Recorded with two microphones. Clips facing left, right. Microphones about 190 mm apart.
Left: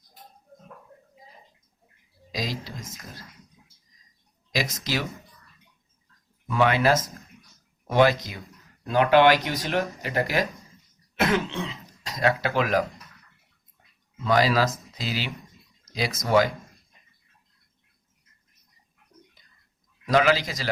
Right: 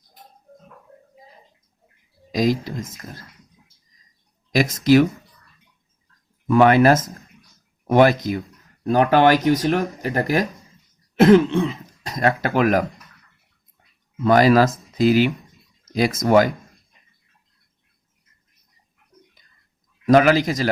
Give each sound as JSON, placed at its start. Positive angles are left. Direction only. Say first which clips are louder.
{"t": 2.3, "sound": "speech", "louder": "right 12 dB", "side_deg": -50}
{"t": 4.5, "sound": "speech", "louder": "right 13 dB", "side_deg": -50}
{"t": 6.5, "sound": "speech", "louder": "right 8 dB", "side_deg": -50}
{"t": 14.3, "sound": "speech", "louder": "right 7 dB", "side_deg": -50}
{"t": 20.1, "sound": "speech", "louder": "right 7 dB", "side_deg": -50}